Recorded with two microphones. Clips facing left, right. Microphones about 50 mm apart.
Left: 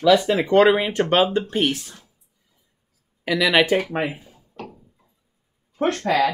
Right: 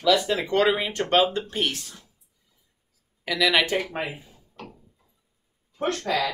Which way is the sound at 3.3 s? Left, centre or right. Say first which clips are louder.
Left 3 dB; centre.